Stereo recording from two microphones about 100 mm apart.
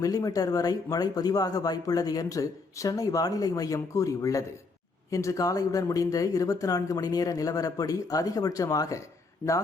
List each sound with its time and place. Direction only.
0.0 s speech: 35° left (ahead or behind)